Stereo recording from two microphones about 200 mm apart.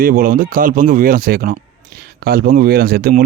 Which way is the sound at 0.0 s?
45° right (ahead or behind).